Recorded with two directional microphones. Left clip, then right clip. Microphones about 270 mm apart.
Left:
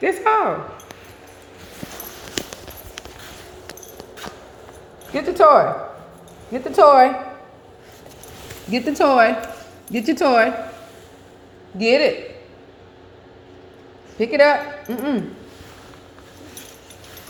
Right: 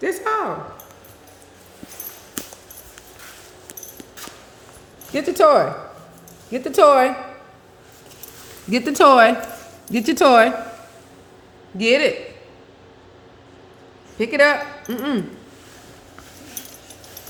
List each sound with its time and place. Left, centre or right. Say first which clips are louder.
0.0 s speech: left 4 dB; centre
5.1 s speech: left 2 dB; centre
8.7 s speech: right 4 dB; right
11.8 s speech: left 1 dB; centre
14.2 s speech: left 1 dB; centre